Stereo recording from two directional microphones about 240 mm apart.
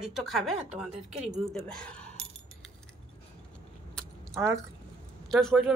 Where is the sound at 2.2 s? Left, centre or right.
Right.